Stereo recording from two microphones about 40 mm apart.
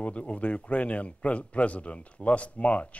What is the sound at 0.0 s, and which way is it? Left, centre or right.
A man's voice, left.